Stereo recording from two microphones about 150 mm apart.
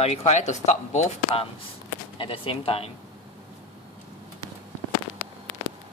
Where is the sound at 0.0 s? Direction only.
45° left (ahead or behind).